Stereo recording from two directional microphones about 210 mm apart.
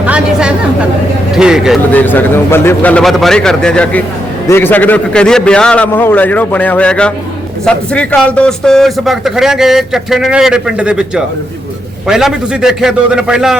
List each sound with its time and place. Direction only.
0.0 s chatter: 5° right (ahead or behind)
1.3 s a man's voice: 5° right (ahead or behind)
1.9 s a man's voice: 10° left (ahead or behind)